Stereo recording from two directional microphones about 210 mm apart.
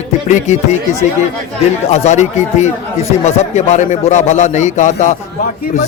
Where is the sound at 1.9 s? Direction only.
35° left (ahead or behind).